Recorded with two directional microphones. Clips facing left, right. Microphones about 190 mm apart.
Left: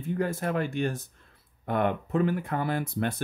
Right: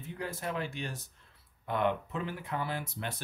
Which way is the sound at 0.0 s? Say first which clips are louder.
Left 9 dB; 50° left (ahead or behind).